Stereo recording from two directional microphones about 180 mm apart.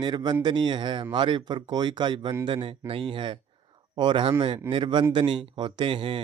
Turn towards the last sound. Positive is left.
turn(degrees=-30)  # may be behind; listen again after turning